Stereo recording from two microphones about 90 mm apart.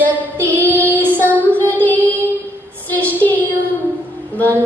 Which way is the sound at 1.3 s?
20° left (ahead or behind).